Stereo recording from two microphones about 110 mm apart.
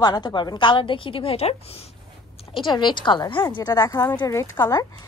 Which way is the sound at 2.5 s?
45° left (ahead or behind).